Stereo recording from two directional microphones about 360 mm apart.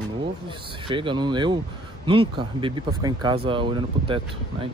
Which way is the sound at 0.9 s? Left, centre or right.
Centre.